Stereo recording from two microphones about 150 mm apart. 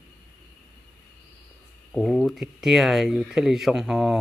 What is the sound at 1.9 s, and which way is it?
Speech, centre (ahead or behind).